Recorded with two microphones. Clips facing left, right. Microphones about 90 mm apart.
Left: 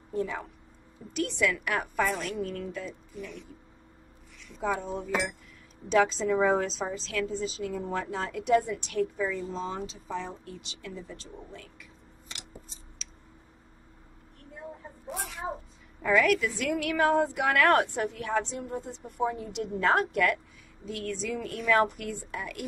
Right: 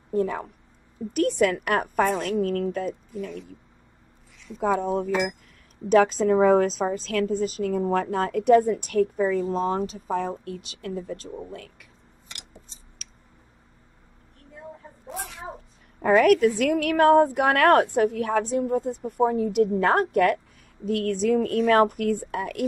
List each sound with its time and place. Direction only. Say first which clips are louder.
0.1 s a woman's voice: right 7 dB; 50° right (ahead or behind)
4.7 s a woman's voice: right 7 dB; 55° right (ahead or behind)
15.0 s a sound: right 1 dB; centre (ahead or behind)
16.0 s a woman's voice: right 7 dB; 50° right (ahead or behind)